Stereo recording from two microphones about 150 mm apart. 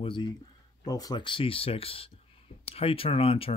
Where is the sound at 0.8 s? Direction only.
25° left (ahead or behind).